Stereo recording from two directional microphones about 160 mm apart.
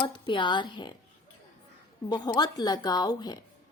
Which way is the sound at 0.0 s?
30° left (ahead or behind).